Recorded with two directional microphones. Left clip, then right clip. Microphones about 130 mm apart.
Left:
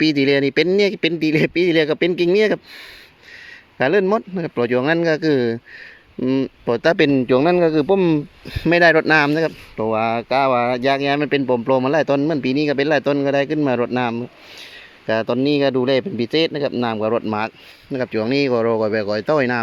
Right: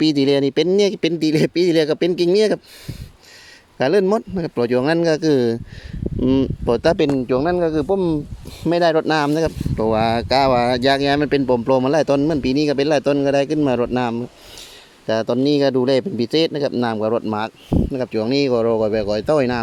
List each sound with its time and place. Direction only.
0.0 s speech: 25° right (ahead or behind)
3.8 s speech: 25° right (ahead or behind)
6.9 s speech: 5° right (ahead or behind)
7.7 s speech: 5° left (ahead or behind)
8.6 s speech: 5° right (ahead or behind)
9.7 s speech: 50° right (ahead or behind); by 19.5 s 30° right (ahead or behind)